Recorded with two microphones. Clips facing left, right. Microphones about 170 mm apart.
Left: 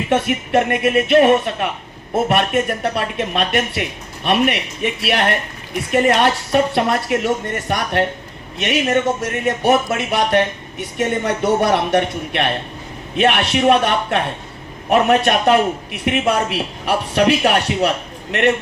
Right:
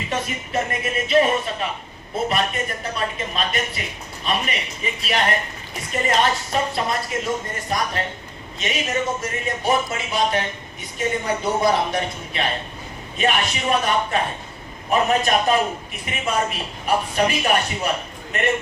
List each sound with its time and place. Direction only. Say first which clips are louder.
0.1 s speech: left 10 dB; 70° left (ahead or behind)